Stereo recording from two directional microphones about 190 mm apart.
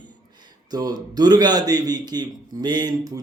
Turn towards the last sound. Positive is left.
turn(degrees=-20)  # may be behind; listen again after turning